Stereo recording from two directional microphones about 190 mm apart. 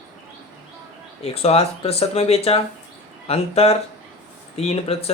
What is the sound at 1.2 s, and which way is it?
Speech, 30° left (ahead or behind).